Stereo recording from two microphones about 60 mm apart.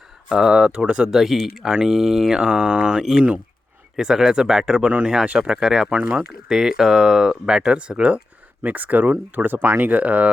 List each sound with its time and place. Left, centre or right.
0.3 s speech: centre
1.2 s speech: centre
5.9 s speech: right
6.5 s speech: centre; by 10.3 s right